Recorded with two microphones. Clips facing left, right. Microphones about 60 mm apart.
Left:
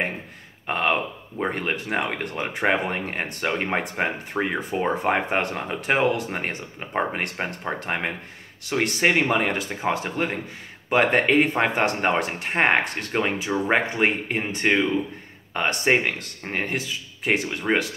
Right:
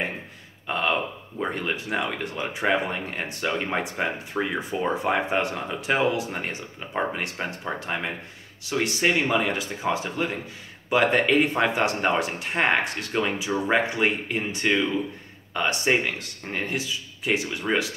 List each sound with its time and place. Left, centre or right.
0.7 s speech: left
6.9 s speech: left
7.8 s speech: left